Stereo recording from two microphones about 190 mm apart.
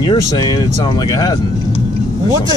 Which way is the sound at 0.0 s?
20° left (ahead or behind).